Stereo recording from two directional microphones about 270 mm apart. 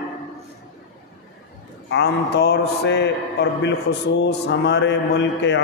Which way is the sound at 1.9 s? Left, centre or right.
Left.